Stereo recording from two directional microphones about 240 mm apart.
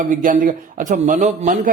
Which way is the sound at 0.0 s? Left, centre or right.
Right.